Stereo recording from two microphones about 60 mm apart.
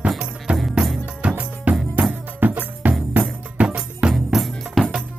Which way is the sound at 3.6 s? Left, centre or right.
Centre.